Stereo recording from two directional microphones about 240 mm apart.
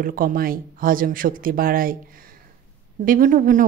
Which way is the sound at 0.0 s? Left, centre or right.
Right.